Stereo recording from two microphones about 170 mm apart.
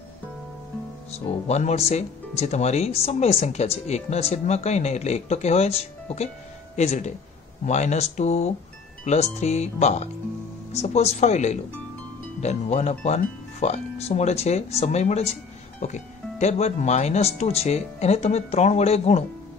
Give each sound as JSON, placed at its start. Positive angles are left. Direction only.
{"t": 1.5, "sound": "speech", "side_deg": 40}